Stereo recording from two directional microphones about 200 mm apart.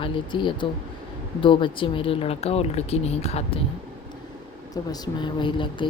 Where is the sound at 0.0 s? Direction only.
25° left (ahead or behind).